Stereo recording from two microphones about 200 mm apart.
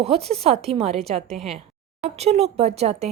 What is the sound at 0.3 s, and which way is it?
Speech, 30° right (ahead or behind).